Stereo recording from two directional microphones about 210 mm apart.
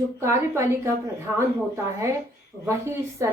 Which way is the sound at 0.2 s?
15° right (ahead or behind).